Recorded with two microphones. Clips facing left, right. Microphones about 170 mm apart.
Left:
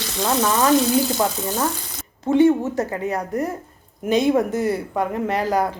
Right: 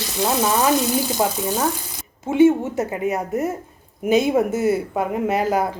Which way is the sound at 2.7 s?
20° right (ahead or behind).